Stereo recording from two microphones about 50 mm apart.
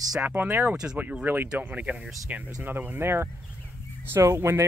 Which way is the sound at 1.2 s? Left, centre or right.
Right.